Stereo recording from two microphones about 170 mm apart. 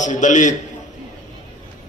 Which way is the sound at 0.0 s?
50° left (ahead or behind).